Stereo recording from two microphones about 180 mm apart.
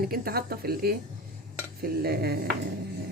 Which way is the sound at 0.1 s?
60° right (ahead or behind).